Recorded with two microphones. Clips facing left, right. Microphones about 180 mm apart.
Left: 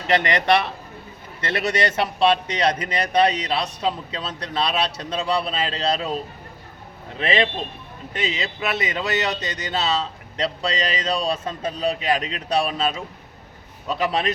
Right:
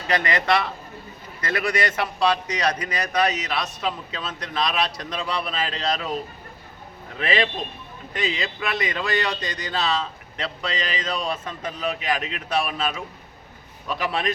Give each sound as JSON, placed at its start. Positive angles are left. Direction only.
{"t": 0.1, "sound": "speech", "side_deg": 30}
{"t": 7.2, "sound": "speech", "side_deg": 25}